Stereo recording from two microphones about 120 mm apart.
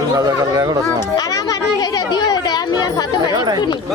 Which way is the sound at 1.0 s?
30° left (ahead or behind).